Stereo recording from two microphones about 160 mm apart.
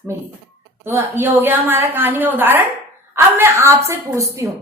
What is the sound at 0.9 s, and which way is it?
A woman's voice, 15° right (ahead or behind).